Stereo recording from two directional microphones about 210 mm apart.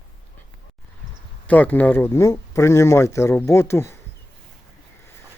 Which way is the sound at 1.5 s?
10° left (ahead or behind).